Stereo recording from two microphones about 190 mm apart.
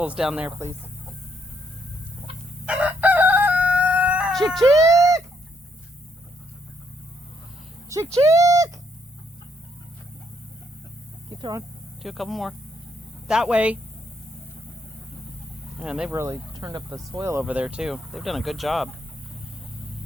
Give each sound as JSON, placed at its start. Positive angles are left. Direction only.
{"t": 0.0, "sound": "speech", "side_deg": -5}
{"t": 2.6, "sound": "crowing", "side_deg": -5}
{"t": 4.6, "sound": "speech", "side_deg": -15}
{"t": 7.9, "sound": "speech", "side_deg": -15}
{"t": 12.0, "sound": "speech", "side_deg": 0}
{"t": 15.8, "sound": "speech", "side_deg": -5}